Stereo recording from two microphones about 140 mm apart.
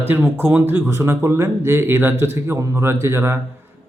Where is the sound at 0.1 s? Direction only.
15° right (ahead or behind).